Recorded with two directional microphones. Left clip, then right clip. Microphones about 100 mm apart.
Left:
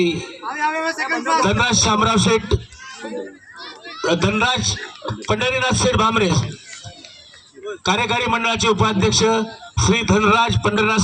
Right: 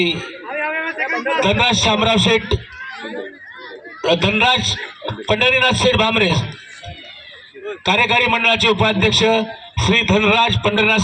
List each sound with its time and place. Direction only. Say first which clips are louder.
0.2 s a sound: left 1 dB; 20° left (ahead or behind)
1.4 s a man's voice: right 4 dB; 60° left (ahead or behind)
4.0 s a man's voice: right 3 dB; 60° left (ahead or behind)
7.9 s a man's voice: right 4 dB; 65° left (ahead or behind)